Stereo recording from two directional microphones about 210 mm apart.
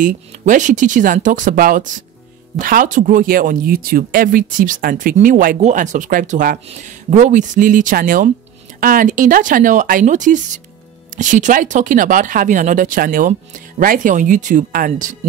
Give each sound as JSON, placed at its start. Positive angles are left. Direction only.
{"t": 0.0, "sound": "speech", "side_deg": -35}